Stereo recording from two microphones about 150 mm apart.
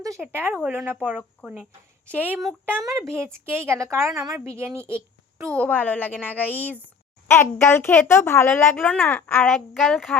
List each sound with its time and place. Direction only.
0.0 s a woman's voice: 20° right (ahead or behind)
2.0 s a woman's voice: 10° right (ahead or behind)
4.9 s a sound: 15° right (ahead or behind)
5.6 s a woman's voice: 10° left (ahead or behind)